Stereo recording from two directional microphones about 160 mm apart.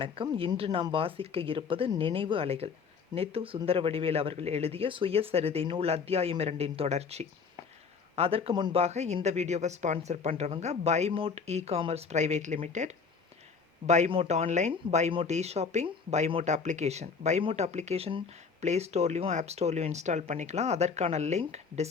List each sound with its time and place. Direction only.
0.0 s speech: 35° right (ahead or behind)